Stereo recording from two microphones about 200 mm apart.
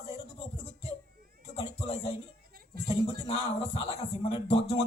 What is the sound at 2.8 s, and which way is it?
Speech, 30° left (ahead or behind).